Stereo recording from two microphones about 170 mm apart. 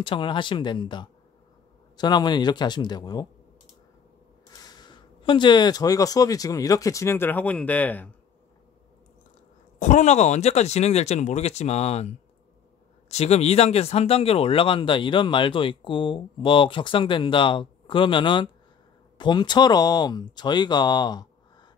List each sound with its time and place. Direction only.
0.0 s speech: 30° left (ahead or behind)
4.5 s speech: 25° left (ahead or behind)
9.8 s speech: 45° left (ahead or behind); by 21.3 s 25° left (ahead or behind)